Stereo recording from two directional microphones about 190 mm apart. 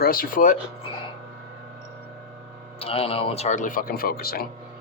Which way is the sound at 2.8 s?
30° left (ahead or behind).